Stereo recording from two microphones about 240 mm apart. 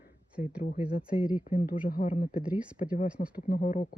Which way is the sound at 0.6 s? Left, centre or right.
Left.